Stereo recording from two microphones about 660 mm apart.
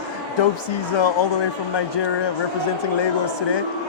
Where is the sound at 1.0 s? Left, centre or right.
Left.